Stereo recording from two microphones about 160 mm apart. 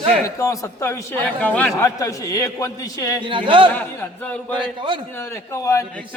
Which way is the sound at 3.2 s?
30° right (ahead or behind).